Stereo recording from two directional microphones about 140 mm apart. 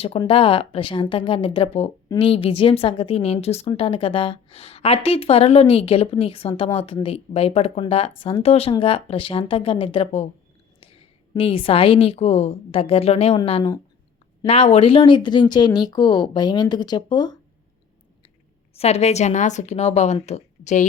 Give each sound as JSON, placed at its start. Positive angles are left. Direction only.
{"t": 0.3, "sound": "a woman's voice", "side_deg": 40}
{"t": 18.8, "sound": "a woman's voice", "side_deg": 50}